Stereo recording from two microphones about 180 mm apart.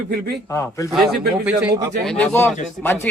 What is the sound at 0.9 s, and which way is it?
A man's voice, centre (ahead or behind).